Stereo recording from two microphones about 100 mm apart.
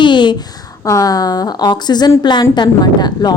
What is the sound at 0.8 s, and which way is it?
A woman's voice, 35° left (ahead or behind).